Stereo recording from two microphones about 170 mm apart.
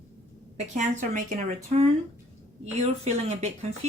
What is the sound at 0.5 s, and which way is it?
Speech, 45° right (ahead or behind).